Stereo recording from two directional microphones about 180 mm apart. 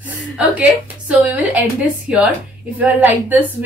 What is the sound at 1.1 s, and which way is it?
Speech, 5° right (ahead or behind).